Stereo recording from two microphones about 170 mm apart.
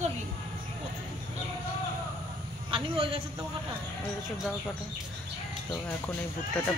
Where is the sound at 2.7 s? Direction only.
30° right (ahead or behind).